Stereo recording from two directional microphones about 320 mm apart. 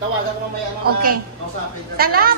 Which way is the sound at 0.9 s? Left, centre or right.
Right.